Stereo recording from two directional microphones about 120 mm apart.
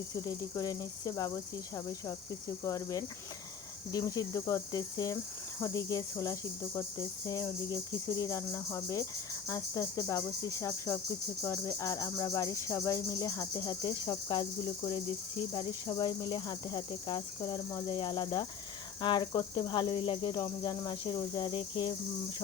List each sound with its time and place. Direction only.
0.1 s cricket: 35° left (ahead or behind)